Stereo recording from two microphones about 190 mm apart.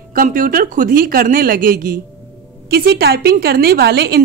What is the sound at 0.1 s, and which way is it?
A woman's voice, 45° right (ahead or behind).